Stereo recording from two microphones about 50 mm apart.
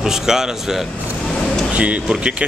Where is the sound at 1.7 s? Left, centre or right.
Right.